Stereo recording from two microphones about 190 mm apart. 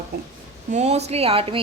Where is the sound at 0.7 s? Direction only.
35° right (ahead or behind).